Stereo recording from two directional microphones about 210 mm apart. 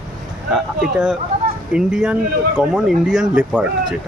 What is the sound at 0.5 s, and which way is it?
Speech, 5° right (ahead or behind).